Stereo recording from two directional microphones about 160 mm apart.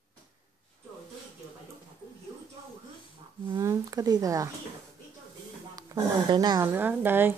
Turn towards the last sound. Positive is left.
turn(degrees=-10)  # may be behind; listen again after turning